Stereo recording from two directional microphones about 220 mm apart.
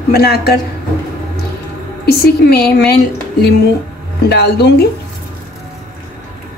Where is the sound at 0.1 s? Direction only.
45° left (ahead or behind).